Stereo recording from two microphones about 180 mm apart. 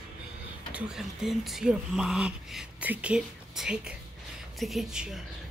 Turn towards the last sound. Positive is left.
turn(degrees=-5)  # may be behind; listen again after turning